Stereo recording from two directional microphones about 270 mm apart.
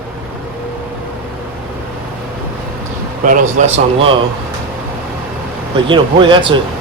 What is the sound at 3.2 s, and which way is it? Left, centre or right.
Speech, right.